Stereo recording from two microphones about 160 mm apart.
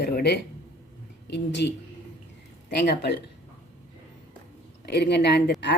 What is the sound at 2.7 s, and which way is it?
Speech, 90° left.